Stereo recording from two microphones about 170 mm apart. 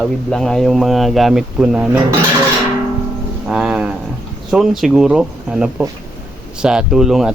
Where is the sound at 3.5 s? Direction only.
5° right (ahead or behind).